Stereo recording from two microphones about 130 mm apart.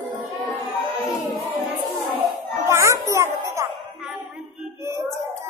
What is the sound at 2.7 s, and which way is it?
Music, 20° right (ahead or behind).